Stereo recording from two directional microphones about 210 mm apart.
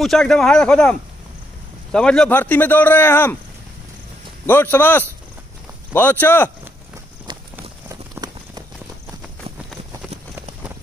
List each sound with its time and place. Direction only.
0.0 s a man's voice: centre (ahead or behind)
4.5 s speech: 10° left (ahead or behind)
7.3 s clip-clop: 20° right (ahead or behind)